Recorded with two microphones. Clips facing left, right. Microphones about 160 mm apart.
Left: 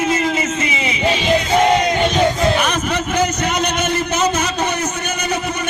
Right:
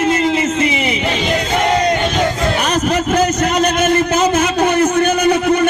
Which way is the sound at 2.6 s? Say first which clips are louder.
Right 4 dB; 40° right (ahead or behind).